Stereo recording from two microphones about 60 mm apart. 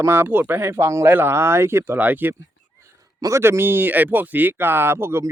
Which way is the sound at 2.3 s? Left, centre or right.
Right.